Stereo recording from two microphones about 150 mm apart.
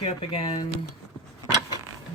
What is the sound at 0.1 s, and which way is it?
Speech, 40° left (ahead or behind).